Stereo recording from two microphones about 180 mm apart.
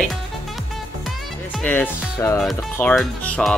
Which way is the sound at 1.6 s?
10° left (ahead or behind).